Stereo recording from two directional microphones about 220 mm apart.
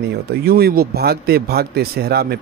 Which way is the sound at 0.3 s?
45° right (ahead or behind).